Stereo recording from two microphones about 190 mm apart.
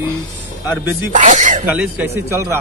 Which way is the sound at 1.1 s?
40° right (ahead or behind).